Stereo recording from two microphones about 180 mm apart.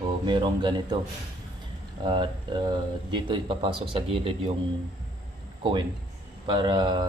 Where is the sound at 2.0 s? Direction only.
25° right (ahead or behind).